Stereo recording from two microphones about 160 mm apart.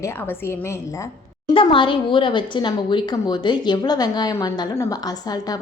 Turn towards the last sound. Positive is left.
turn(degrees=25)  # may be behind; listen again after turning